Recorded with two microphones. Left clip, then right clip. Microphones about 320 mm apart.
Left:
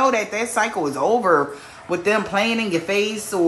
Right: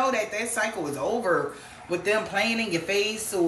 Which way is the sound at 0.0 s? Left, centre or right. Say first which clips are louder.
Left 6 dB; centre.